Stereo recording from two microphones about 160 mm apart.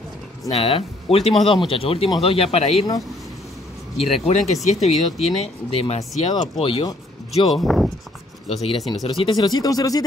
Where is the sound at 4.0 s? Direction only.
40° left (ahead or behind).